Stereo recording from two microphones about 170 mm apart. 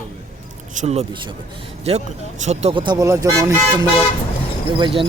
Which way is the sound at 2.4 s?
40° right (ahead or behind).